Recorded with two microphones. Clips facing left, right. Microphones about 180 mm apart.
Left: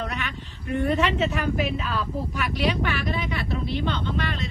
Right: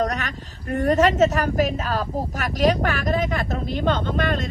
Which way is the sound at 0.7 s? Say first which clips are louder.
Right 5 dB; 40° right (ahead or behind).